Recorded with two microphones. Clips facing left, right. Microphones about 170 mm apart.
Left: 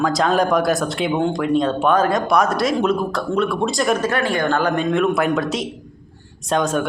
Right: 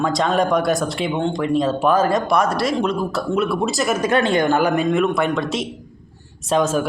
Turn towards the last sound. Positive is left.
turn(degrees=0)  # may be behind; listen again after turning